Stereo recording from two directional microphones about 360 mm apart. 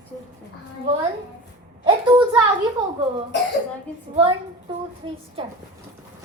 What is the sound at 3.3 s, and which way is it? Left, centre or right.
Speech, left.